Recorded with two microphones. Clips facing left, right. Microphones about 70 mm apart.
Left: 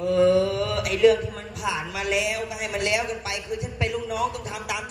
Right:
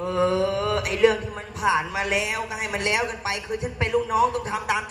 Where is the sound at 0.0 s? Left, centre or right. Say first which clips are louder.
Left 3 dB; right.